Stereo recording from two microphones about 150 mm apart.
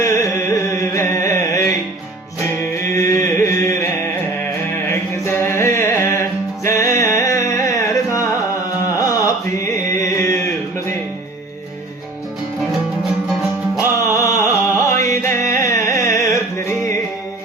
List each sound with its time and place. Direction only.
0.0 s carnatic music: 20° left (ahead or behind)
2.4 s music: 15° left (ahead or behind)
2.9 s a sound: 20° left (ahead or behind)
6.7 s music: 20° left (ahead or behind)
13.7 s music: 20° left (ahead or behind)